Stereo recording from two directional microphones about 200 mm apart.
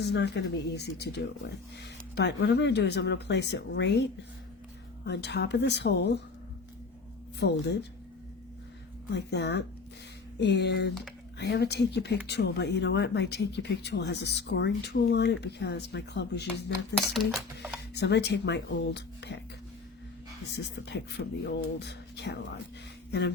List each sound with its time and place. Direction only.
0.1 s speech: 60° left (ahead or behind)
7.3 s speech: 55° left (ahead or behind)
9.1 s speech: 55° left (ahead or behind)
17.2 s speech: 5° right (ahead or behind)
17.9 s speech: 55° left (ahead or behind)
20.7 s speech: 60° left (ahead or behind)